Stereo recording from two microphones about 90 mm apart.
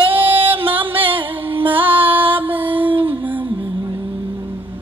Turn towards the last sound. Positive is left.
turn(degrees=-20)  # may be behind; listen again after turning